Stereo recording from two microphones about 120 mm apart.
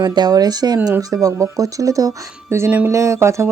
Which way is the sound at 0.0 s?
35° right (ahead or behind).